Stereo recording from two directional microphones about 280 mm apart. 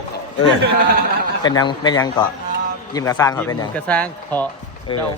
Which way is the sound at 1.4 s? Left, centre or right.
Centre.